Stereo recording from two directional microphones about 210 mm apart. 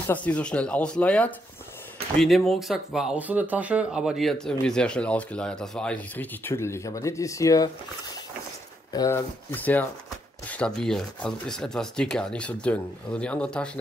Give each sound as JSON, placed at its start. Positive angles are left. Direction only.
{"t": 0.0, "sound": "speech", "side_deg": 5}
{"t": 8.9, "sound": "speech", "side_deg": 15}